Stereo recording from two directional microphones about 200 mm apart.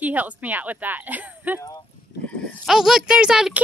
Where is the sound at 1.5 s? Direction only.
15° left (ahead or behind).